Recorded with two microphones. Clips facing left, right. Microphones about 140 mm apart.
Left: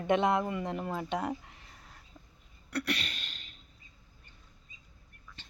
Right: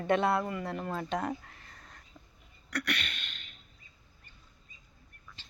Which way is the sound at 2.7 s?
30° left (ahead or behind).